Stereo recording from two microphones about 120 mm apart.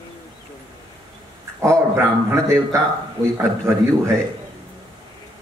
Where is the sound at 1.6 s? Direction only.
25° right (ahead or behind).